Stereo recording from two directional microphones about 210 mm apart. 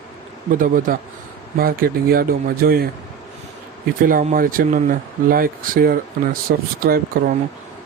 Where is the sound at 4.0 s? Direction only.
40° right (ahead or behind).